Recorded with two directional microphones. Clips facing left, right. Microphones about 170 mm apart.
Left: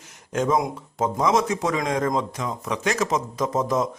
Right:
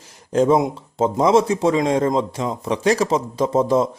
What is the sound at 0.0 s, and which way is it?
A man's voice, 35° right (ahead or behind).